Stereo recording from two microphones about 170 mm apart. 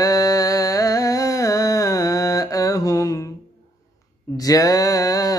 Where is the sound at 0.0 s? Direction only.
20° left (ahead or behind).